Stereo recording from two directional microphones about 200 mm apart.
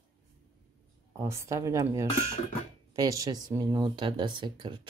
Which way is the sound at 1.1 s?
15° right (ahead or behind).